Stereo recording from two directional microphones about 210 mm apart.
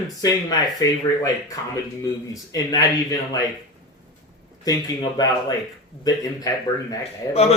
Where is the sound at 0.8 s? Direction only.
15° left (ahead or behind).